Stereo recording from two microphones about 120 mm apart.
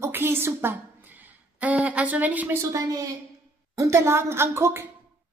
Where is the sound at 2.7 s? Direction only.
30° right (ahead or behind).